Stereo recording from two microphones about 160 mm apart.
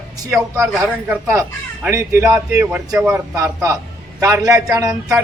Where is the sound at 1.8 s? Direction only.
20° right (ahead or behind).